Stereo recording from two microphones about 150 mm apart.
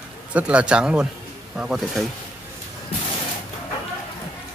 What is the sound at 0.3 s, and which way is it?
A man's voice, 10° right (ahead or behind).